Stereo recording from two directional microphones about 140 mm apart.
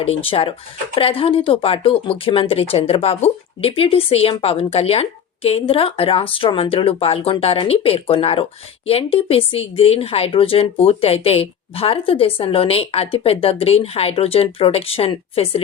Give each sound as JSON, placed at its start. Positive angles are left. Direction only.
{"t": 0.0, "sound": "a woman's voice", "side_deg": 40}